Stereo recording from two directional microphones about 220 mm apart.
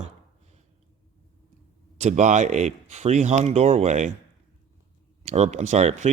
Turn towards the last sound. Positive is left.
turn(degrees=-30)  # may be behind; listen again after turning